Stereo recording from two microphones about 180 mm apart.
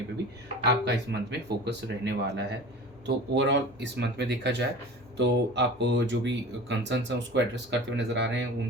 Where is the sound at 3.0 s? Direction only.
75° right (ahead or behind).